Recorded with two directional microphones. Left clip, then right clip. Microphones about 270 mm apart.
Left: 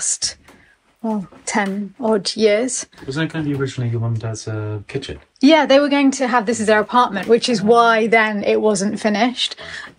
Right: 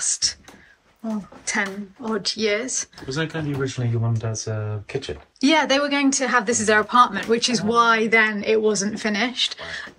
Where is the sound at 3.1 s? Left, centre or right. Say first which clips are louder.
Left 5 dB; centre.